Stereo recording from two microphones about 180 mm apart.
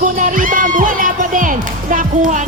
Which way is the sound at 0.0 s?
45° right (ahead or behind).